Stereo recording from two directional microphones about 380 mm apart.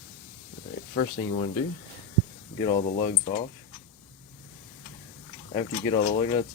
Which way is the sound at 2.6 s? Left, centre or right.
Centre.